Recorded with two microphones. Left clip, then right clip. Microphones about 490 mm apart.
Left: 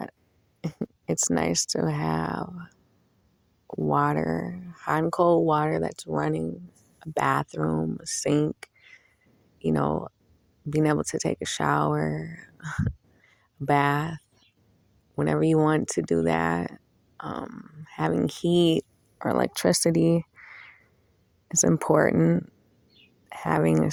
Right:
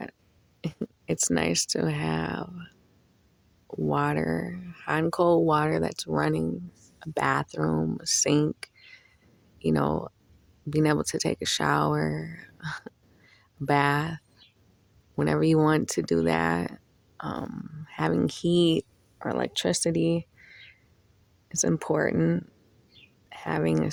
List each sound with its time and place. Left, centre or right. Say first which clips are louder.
0.6 s speech: left 1 dB; left
3.8 s speech: left 3 dB; left